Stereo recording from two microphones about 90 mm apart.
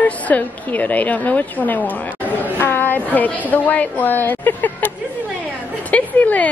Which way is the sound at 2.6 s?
25° left (ahead or behind).